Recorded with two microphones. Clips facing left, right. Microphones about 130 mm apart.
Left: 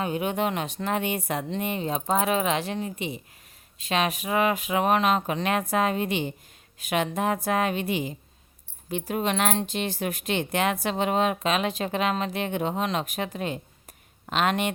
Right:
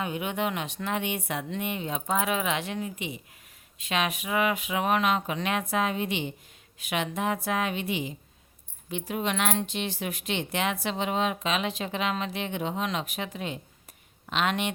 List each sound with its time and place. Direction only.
0.0 s speech: 40° left (ahead or behind)